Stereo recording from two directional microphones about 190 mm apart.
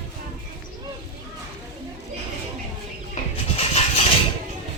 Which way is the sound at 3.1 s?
35° left (ahead or behind).